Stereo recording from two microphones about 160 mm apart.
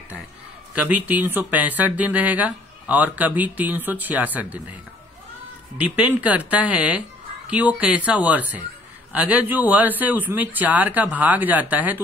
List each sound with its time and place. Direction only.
0.7 s speech: 10° right (ahead or behind)
5.9 s speech: 10° right (ahead or behind)